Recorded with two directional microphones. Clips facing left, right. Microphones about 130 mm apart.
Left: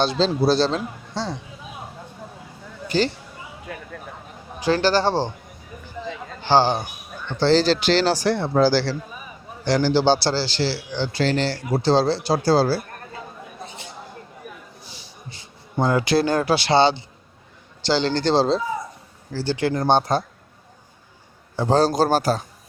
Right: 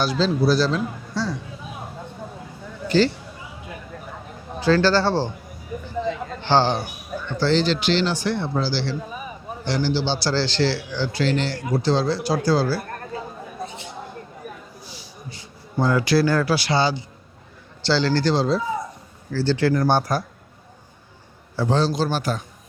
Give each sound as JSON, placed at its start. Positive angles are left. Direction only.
{"t": 0.0, "sound": "speech", "side_deg": 25}
{"t": 3.7, "sound": "speech", "side_deg": 65}
{"t": 4.6, "sound": "speech", "side_deg": 15}
{"t": 6.4, "sound": "a man's voice", "side_deg": 10}
{"t": 7.3, "sound": "a man's voice", "side_deg": 35}
{"t": 10.3, "sound": "speech", "side_deg": 10}
{"t": 11.2, "sound": "speech", "side_deg": 35}
{"t": 14.8, "sound": "a sound", "side_deg": 25}
{"t": 17.8, "sound": "speech", "side_deg": 20}
{"t": 21.7, "sound": "speech", "side_deg": 45}